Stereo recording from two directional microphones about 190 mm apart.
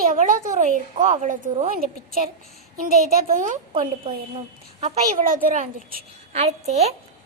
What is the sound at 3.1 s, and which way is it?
Speech, 45° right (ahead or behind).